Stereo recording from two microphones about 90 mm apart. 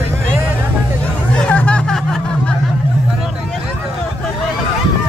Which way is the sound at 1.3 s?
15° left (ahead or behind).